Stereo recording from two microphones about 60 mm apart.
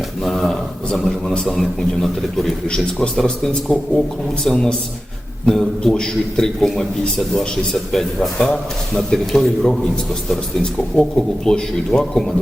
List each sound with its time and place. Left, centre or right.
0.3 s a man's voice: centre
2.6 s a man's voice: centre
11.4 s a man's voice: centre